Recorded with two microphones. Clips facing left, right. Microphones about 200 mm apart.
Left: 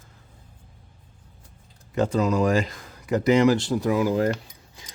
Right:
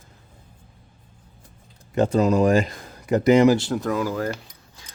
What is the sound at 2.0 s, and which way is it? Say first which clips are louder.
Speech: right 3 dB; 30° right (ahead or behind).